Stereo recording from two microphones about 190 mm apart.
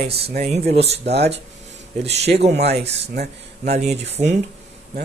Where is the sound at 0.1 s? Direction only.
60° right (ahead or behind).